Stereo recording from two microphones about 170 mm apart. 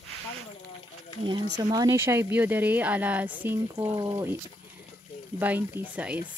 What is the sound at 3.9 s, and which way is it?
Speech, 20° right (ahead or behind).